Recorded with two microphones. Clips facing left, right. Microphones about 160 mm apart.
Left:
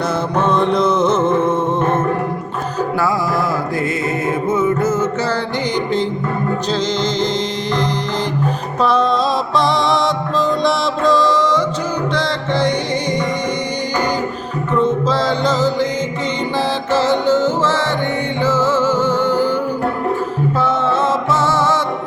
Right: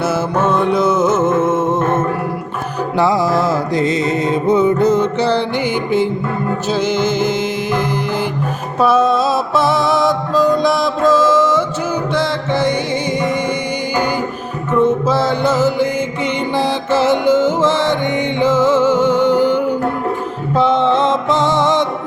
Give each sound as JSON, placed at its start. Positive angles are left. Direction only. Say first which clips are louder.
{"t": 0.3, "sound": "music", "louder": "even", "side_deg": -5}
{"t": 3.0, "sound": "music", "louder": "right 6 dB", "side_deg": -20}
{"t": 4.9, "sound": "music", "louder": "right 4 dB", "side_deg": -15}
{"t": 6.7, "sound": "music", "louder": "right 6 dB", "side_deg": -10}
{"t": 14.8, "sound": "music", "louder": "right 3 dB", "side_deg": -10}